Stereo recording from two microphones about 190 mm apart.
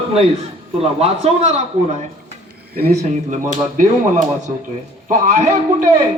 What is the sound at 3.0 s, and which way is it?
Speech, 40° right (ahead or behind).